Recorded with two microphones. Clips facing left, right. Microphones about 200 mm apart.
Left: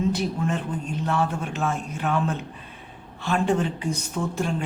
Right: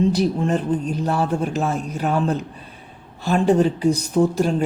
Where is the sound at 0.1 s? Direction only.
35° right (ahead or behind).